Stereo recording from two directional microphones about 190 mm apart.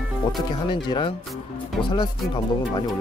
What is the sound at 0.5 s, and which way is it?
Speech, 25° left (ahead or behind).